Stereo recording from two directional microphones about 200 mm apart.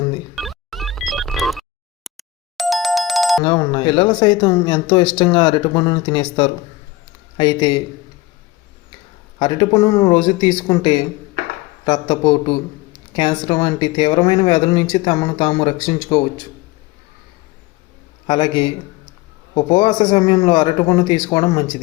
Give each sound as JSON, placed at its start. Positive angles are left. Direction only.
{"t": 0.3, "sound": "music", "side_deg": 0}
{"t": 2.0, "sound": "telephone bell ringing", "side_deg": 0}
{"t": 3.4, "sound": "speech", "side_deg": 20}
{"t": 9.4, "sound": "speech", "side_deg": 20}
{"t": 18.3, "sound": "speech", "side_deg": 25}
{"t": 19.7, "sound": "speech", "side_deg": 20}